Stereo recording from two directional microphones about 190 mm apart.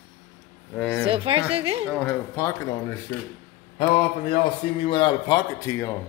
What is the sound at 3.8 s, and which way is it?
A man's voice, 30° left (ahead or behind).